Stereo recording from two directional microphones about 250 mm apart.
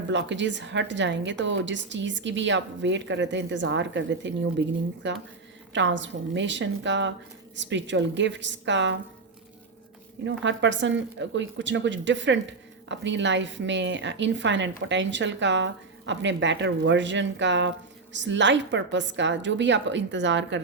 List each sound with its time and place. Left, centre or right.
0.1 s a woman's voice: right
10.4 s a woman's voice: right